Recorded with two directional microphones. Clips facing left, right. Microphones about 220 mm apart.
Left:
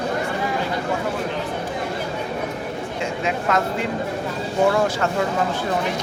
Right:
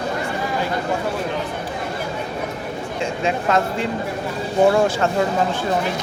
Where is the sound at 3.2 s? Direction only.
30° right (ahead or behind).